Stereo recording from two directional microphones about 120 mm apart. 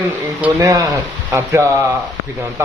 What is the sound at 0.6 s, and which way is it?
Speech, 25° right (ahead or behind).